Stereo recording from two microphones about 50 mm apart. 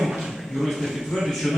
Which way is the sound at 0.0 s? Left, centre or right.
Centre.